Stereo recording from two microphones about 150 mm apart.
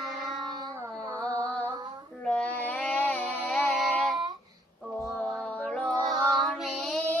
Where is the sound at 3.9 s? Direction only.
Centre (ahead or behind).